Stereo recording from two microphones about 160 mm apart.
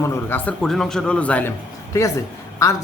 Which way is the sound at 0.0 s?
10° left (ahead or behind).